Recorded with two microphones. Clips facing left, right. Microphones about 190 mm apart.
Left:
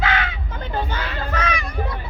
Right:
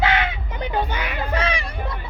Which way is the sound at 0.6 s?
15° right (ahead or behind).